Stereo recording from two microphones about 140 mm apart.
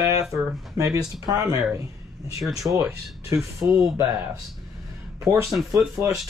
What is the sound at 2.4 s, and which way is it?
Speech, centre (ahead or behind).